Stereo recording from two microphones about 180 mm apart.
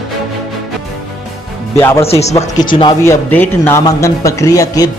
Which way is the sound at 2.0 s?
35° left (ahead or behind).